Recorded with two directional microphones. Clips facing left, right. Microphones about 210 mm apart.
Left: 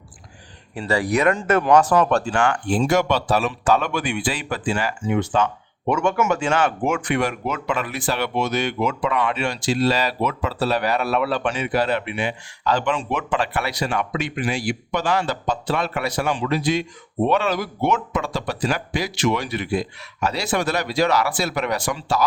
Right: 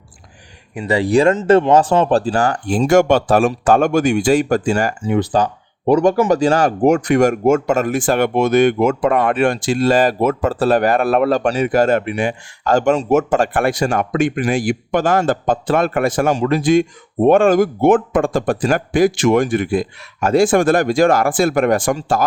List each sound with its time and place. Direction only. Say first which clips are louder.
0.8 s speech: right 6 dB; 20° right (ahead or behind); by 22.2 s 50° right (ahead or behind)